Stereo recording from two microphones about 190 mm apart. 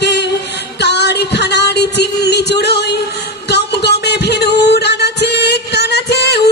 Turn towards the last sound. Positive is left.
turn(degrees=60)  # may be behind; listen again after turning